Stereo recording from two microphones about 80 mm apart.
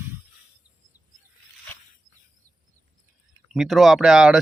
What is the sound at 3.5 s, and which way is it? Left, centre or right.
Speech, centre.